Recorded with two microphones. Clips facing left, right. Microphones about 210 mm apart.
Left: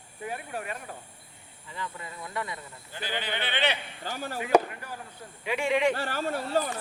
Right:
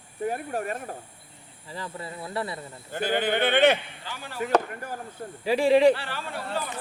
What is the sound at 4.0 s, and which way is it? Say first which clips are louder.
Speech: left 5 dB; 45° left (ahead or behind).